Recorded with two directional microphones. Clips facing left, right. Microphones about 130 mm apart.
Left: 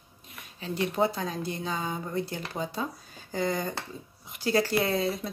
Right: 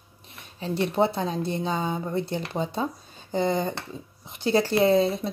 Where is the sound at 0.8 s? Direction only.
25° right (ahead or behind).